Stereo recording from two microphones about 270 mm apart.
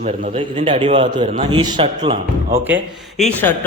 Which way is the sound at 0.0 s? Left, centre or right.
Right.